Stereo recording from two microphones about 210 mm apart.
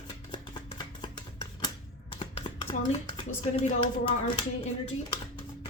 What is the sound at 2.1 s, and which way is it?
Speech, 30° left (ahead or behind).